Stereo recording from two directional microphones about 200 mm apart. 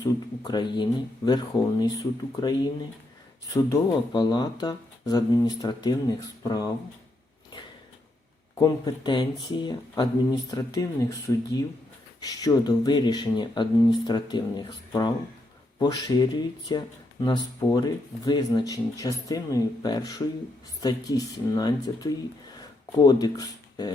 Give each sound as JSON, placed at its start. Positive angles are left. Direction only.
{"t": 0.0, "sound": "speech", "side_deg": 20}
{"t": 8.5, "sound": "speech", "side_deg": 20}